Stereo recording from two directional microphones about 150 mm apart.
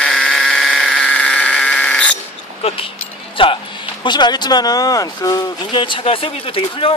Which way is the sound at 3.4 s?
35° left (ahead or behind).